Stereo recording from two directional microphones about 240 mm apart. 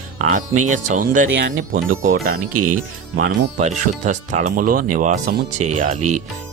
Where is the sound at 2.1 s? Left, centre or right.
Right.